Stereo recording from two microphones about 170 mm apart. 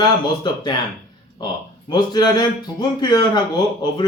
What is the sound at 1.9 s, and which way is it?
A man's voice, 25° left (ahead or behind).